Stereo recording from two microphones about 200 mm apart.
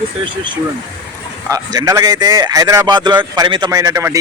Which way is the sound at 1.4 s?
15° right (ahead or behind).